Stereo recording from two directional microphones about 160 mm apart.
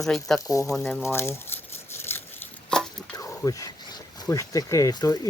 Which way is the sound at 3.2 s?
20° left (ahead or behind).